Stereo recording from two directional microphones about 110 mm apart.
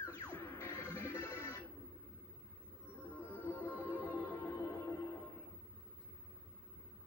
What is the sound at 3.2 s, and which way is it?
Music, 20° left (ahead or behind).